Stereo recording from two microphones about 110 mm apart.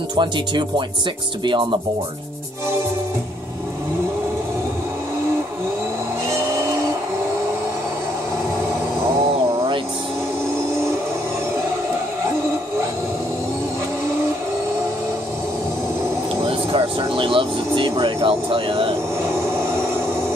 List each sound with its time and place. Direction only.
0.1 s speech: 45° right (ahead or behind)
16.4 s speech: 60° right (ahead or behind)